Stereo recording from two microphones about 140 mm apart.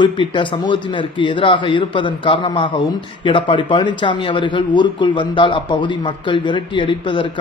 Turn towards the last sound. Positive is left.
turn(degrees=35)  # may be behind; listen again after turning